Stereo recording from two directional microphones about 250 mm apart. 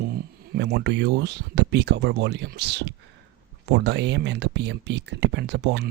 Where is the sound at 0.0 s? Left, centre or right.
Right.